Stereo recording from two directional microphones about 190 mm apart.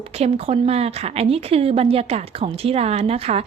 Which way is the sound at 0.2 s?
30° right (ahead or behind).